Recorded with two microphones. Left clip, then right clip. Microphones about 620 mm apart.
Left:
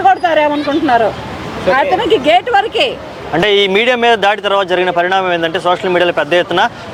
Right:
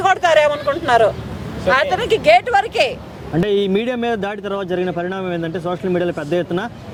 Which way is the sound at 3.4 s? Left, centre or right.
Left.